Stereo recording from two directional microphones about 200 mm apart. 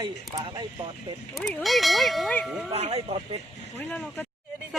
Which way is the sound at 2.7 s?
30° right (ahead or behind).